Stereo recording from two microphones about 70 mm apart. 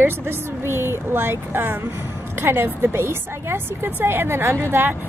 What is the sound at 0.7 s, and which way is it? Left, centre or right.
Speech, right.